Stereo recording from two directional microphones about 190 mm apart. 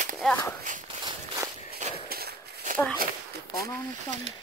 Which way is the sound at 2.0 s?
50° right (ahead or behind).